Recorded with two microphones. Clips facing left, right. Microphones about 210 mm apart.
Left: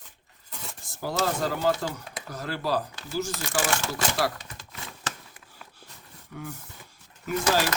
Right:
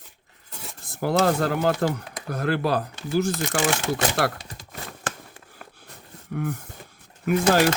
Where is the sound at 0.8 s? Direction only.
60° right (ahead or behind).